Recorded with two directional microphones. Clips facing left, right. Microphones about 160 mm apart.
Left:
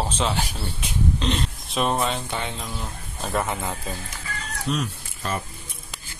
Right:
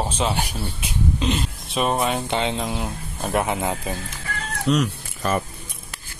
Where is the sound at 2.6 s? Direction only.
70° right (ahead or behind).